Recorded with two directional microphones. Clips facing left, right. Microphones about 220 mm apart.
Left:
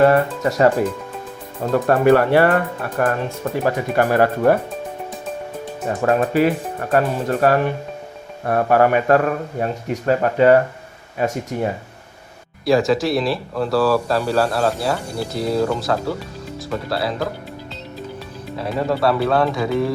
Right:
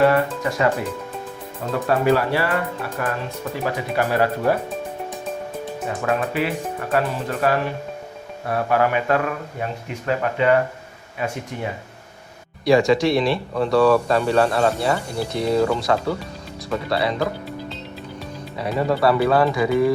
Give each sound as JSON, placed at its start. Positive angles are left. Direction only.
{"t": 0.0, "sound": "speech", "side_deg": 40}
{"t": 1.7, "sound": "speech", "side_deg": 55}
{"t": 3.9, "sound": "speech", "side_deg": 50}
{"t": 6.0, "sound": "speech", "side_deg": 40}
{"t": 12.6, "sound": "speech", "side_deg": 0}
{"t": 18.6, "sound": "speech", "side_deg": 0}